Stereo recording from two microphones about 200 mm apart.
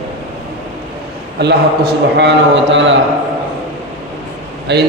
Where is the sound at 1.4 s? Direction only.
55° right (ahead or behind).